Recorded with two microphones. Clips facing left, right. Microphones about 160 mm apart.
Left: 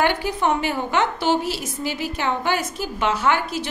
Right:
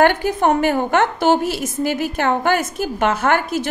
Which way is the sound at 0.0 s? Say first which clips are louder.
Right 6 dB; 50° right (ahead or behind).